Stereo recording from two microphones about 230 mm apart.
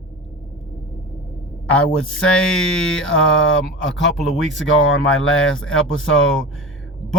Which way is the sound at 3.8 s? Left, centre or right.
Left.